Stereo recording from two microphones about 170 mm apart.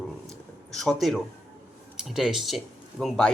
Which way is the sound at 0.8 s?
Centre (ahead or behind).